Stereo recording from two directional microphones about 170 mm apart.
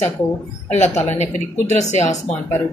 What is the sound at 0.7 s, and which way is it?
Speech, 40° left (ahead or behind).